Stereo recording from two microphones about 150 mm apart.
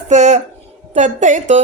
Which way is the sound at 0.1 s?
50° right (ahead or behind).